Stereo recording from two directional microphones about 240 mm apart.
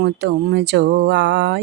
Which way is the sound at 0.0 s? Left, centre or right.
Right.